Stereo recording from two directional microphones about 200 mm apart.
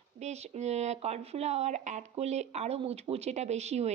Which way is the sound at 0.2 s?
35° right (ahead or behind).